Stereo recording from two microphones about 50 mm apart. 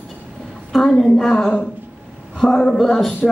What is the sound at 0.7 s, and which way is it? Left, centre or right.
A woman's voice, centre.